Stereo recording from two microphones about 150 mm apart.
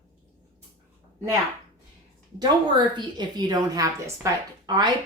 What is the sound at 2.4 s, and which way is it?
A woman's voice, 30° right (ahead or behind).